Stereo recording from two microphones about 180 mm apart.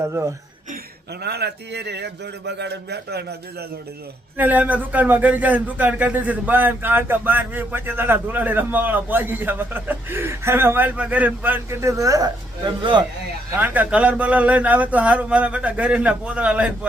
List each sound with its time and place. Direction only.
0.0 s speech: 15° right (ahead or behind)
1.2 s speech: 65° right (ahead or behind)
4.4 s speech: 10° right (ahead or behind); by 13.1 s 25° right (ahead or behind)
13.6 s speech: 10° right (ahead or behind)